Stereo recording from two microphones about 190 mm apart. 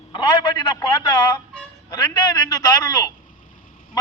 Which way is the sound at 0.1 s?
25° left (ahead or behind).